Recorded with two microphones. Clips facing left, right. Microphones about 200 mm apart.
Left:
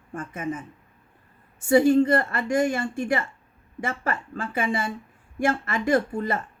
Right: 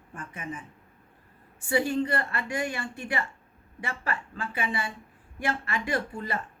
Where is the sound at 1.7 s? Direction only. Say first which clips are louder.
Left 9 dB; 45° left (ahead or behind).